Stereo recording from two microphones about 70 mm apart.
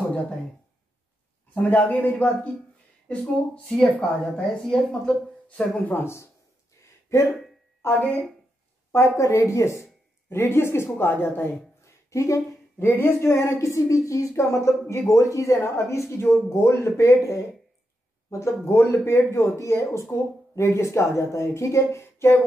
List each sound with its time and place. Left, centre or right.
1.7 s a man's voice: left
5.9 s a man's voice: left
7.8 s a man's voice: left
8.9 s speech: left
11.8 s speech: left